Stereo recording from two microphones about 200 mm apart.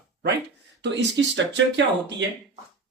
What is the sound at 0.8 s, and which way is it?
Speech, 65° right (ahead or behind).